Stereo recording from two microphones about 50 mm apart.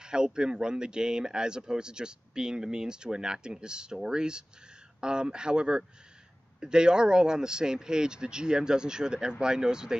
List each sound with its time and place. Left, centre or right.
0.0 s speech: centre